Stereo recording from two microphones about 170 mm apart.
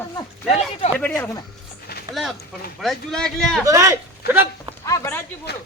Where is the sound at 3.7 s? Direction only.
20° right (ahead or behind).